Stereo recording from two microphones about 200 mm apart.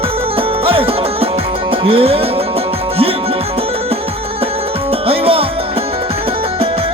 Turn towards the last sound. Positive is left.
turn(degrees=-30)  # may be behind; listen again after turning